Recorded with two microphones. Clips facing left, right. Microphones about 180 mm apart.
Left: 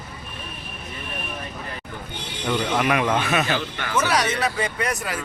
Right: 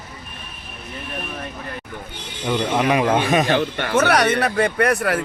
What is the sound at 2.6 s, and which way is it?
Speech, 25° right (ahead or behind).